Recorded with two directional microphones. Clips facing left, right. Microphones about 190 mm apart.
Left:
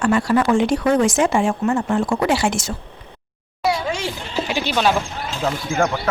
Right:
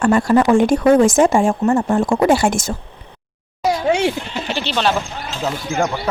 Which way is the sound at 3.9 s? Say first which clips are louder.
Right 9 dB; 60° right (ahead or behind).